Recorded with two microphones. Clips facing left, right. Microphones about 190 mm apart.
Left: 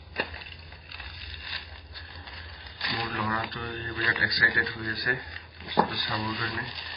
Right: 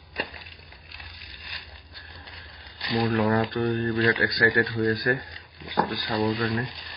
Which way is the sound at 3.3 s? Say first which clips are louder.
Right 11 dB; 55° right (ahead or behind).